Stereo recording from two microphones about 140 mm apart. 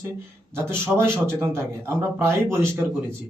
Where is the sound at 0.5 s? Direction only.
15° right (ahead or behind).